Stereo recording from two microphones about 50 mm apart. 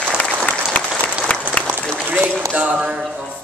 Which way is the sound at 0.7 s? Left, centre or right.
Left.